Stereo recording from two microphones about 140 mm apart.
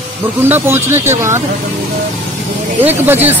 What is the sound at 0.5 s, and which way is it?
Speech, 15° right (ahead or behind).